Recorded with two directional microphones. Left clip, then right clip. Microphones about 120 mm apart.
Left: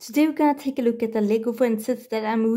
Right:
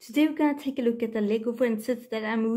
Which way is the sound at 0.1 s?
35° left (ahead or behind).